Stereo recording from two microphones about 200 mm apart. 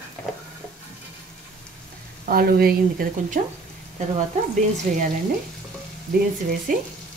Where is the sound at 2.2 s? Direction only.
50° right (ahead or behind).